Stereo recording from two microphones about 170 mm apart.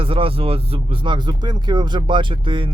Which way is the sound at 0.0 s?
30° right (ahead or behind).